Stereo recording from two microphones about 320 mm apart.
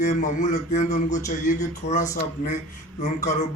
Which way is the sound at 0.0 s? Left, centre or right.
Left.